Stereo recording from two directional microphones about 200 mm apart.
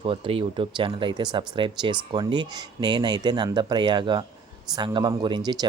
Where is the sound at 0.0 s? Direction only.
25° right (ahead or behind).